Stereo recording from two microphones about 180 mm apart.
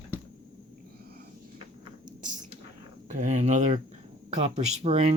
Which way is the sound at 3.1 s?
40° right (ahead or behind).